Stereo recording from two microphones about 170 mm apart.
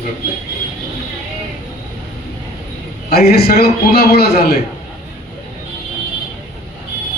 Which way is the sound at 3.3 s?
65° left (ahead or behind).